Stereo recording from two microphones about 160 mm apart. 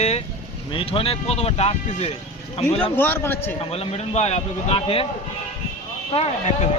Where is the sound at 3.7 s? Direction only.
40° left (ahead or behind).